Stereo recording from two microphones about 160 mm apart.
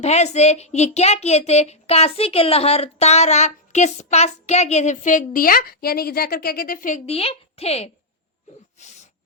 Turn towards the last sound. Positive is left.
turn(degrees=40)  # may be behind; listen again after turning